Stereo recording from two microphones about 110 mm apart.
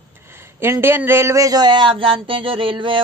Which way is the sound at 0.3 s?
20° right (ahead or behind).